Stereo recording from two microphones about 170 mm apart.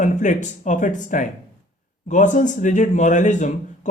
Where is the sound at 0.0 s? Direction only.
45° left (ahead or behind).